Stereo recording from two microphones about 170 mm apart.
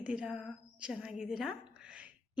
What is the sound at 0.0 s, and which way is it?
A woman's voice, 5° right (ahead or behind).